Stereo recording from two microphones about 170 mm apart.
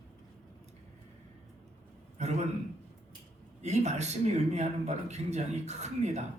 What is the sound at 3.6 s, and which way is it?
Speech, 40° right (ahead or behind).